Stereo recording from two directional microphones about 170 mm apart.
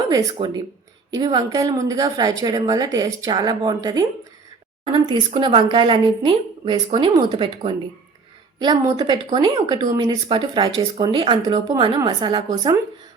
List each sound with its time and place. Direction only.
0.1 s speech: 20° right (ahead or behind)